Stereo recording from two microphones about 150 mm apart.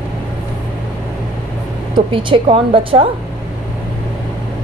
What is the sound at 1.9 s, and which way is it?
A woman's voice, 35° right (ahead or behind).